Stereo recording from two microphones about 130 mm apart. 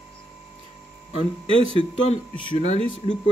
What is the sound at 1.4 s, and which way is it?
Speech, 45° right (ahead or behind).